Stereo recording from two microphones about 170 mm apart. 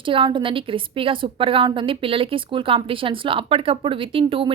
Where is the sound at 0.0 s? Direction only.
30° right (ahead or behind).